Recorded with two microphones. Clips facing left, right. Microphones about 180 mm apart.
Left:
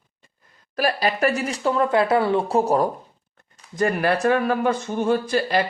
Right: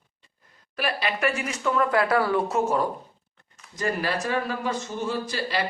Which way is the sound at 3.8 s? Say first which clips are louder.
Left 6 dB; 55° left (ahead or behind).